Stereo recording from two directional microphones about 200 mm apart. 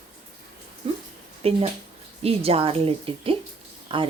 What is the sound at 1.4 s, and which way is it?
Speech, 30° right (ahead or behind).